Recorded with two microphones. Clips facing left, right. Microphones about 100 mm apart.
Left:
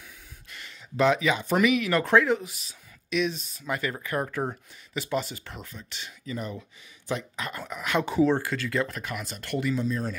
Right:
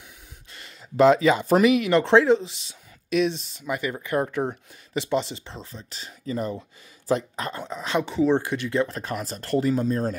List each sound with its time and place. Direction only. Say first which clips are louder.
0.5 s speech: right 1 dB; 35° right (ahead or behind)
3.6 s speech: right 2 dB; 15° right (ahead or behind)
8.0 s speech: left 1 dB; 5° left (ahead or behind)
8.3 s speech: right 3 dB; 20° right (ahead or behind); by 10.1 s 45° right (ahead or behind)